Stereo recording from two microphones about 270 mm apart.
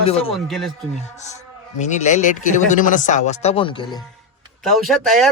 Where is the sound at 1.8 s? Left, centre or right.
Left.